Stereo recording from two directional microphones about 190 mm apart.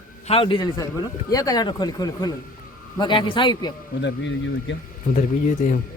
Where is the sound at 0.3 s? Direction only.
30° left (ahead or behind).